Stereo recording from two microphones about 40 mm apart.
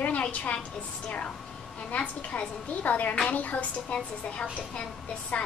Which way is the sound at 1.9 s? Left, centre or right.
Left.